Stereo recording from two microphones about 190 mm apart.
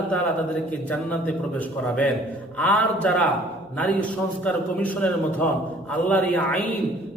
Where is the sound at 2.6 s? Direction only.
10° left (ahead or behind).